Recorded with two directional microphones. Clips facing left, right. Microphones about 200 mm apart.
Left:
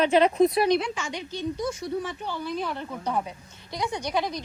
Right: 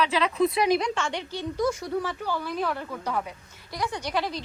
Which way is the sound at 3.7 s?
20° left (ahead or behind).